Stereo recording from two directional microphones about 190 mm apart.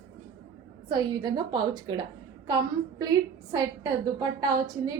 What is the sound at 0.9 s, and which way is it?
Speech, 20° right (ahead or behind).